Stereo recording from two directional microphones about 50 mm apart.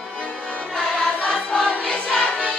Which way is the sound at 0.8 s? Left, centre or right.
Centre.